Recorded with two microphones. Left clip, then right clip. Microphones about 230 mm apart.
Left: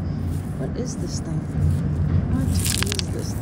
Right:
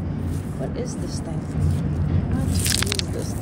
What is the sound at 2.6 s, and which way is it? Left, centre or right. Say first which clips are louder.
Biting: right 3 dB; left.